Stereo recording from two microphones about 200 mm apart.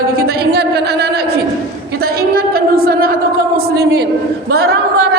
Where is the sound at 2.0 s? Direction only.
50° right (ahead or behind).